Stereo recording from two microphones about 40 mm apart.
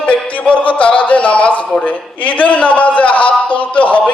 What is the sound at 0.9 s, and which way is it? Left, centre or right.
A man's voice, left.